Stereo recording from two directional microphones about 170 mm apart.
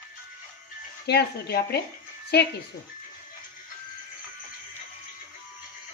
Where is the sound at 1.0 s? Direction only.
70° left (ahead or behind).